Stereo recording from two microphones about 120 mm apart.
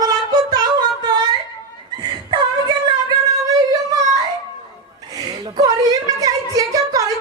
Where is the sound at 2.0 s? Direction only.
40° right (ahead or behind).